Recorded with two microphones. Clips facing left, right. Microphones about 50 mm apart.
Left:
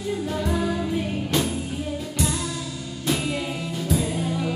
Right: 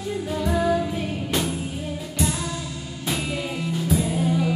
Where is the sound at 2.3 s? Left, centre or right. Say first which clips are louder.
Even; right.